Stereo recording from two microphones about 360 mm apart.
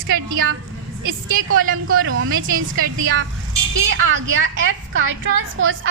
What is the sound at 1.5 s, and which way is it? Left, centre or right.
A woman's voice, right.